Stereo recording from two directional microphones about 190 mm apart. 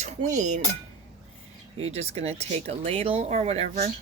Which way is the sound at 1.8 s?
35° right (ahead or behind).